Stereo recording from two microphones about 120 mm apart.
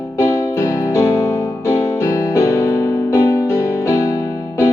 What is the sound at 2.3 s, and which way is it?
Music, 25° left (ahead or behind).